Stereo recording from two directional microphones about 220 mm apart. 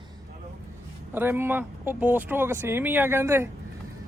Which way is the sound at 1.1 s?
10° right (ahead or behind).